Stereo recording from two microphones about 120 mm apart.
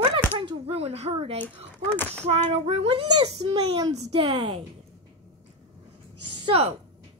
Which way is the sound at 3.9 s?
60° right (ahead or behind).